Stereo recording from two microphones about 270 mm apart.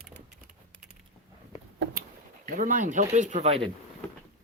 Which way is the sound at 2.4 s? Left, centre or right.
Right.